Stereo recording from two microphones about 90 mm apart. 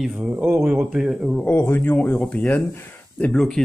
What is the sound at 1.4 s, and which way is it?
Speech, 25° left (ahead or behind).